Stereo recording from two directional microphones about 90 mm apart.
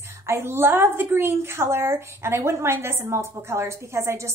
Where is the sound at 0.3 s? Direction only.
25° right (ahead or behind).